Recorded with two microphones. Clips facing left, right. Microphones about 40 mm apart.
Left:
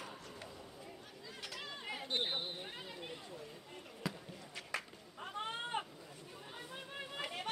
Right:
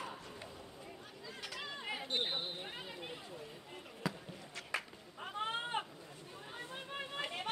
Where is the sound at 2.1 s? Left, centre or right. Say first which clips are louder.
Left 1 dB; centre.